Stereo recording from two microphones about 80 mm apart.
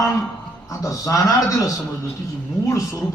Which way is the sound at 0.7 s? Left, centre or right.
Left.